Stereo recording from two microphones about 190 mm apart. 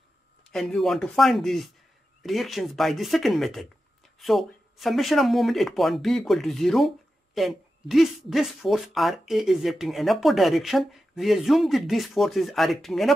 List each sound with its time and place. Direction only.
0.4 s speech: 5° left (ahead or behind)